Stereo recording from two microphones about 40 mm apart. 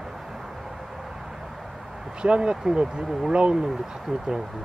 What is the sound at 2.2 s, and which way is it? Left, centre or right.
Speech, right.